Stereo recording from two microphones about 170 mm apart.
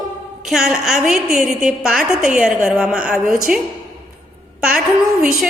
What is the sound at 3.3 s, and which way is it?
Speech, 55° right (ahead or behind).